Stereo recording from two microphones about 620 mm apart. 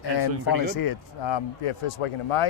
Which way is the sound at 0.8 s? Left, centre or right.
Left.